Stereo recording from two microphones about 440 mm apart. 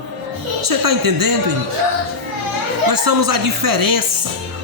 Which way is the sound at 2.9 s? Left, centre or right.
Right.